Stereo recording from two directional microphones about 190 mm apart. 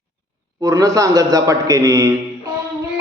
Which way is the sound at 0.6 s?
15° right (ahead or behind).